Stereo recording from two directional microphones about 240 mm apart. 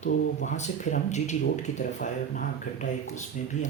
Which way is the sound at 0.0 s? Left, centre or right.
Left.